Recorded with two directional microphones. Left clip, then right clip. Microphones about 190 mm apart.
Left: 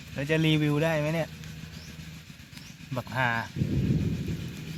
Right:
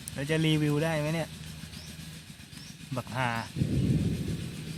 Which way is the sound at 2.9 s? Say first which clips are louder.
Left 4 dB; 10° left (ahead or behind).